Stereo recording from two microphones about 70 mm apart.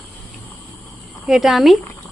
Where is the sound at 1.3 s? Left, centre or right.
Centre.